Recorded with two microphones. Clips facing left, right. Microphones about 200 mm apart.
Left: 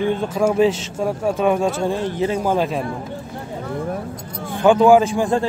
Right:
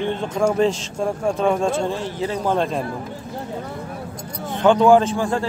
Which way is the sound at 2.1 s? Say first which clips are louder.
Left 3 dB; 20° left (ahead or behind).